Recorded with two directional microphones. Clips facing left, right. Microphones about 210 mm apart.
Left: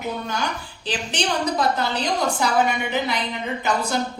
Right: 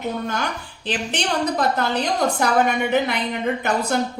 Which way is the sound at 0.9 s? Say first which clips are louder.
Right 1 dB; 55° right (ahead or behind).